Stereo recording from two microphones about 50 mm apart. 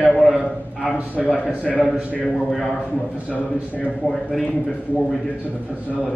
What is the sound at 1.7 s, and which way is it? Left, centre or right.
A man's voice, centre.